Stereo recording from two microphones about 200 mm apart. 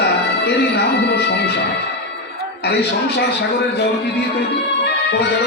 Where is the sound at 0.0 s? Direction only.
55° left (ahead or behind).